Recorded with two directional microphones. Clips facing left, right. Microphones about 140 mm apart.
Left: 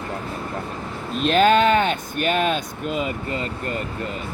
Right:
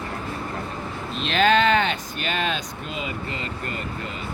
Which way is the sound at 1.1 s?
45° left (ahead or behind).